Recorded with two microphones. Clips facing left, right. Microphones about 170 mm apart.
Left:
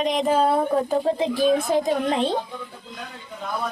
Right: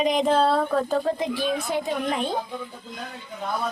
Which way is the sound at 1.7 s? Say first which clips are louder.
Left 5 dB; 40° left (ahead or behind).